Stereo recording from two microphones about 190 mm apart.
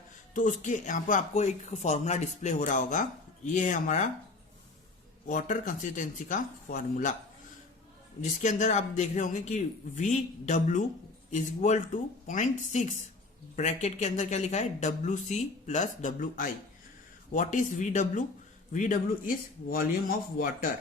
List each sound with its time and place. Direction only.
0.3 s speech: 40° left (ahead or behind)
5.3 s speech: 45° left (ahead or behind)
8.2 s speech: 40° left (ahead or behind)